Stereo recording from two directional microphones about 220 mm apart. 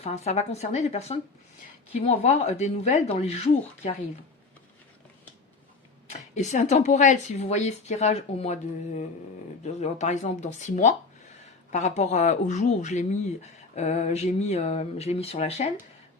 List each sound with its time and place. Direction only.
0.0 s speech: 30° left (ahead or behind)
6.1 s speech: 30° left (ahead or behind)